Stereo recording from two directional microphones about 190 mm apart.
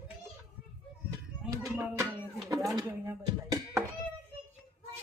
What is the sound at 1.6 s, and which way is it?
Speech, 15° right (ahead or behind).